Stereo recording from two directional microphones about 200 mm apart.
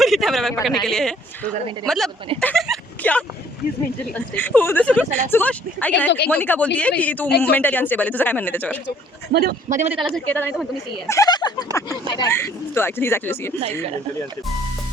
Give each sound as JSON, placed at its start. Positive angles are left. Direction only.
{"t": 0.0, "sound": "speech", "side_deg": 0}
{"t": 2.4, "sound": "speech", "side_deg": 5}
{"t": 7.3, "sound": "speech", "side_deg": 55}
{"t": 7.5, "sound": "speech", "side_deg": 10}
{"t": 9.3, "sound": "a man's voice", "side_deg": -50}
{"t": 10.1, "sound": "speech", "side_deg": 10}